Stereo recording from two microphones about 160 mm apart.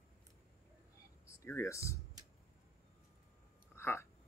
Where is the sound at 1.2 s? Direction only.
15° left (ahead or behind).